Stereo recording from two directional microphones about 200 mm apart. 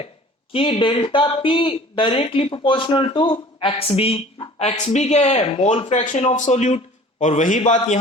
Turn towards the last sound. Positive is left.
turn(degrees=40)  # may be behind; listen again after turning